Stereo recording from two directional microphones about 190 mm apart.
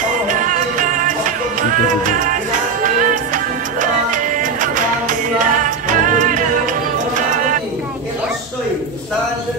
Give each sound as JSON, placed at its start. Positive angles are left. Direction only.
{"t": 0.3, "sound": "music", "side_deg": -45}